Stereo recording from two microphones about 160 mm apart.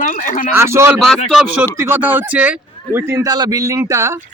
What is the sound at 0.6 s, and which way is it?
Speech, 15° right (ahead or behind).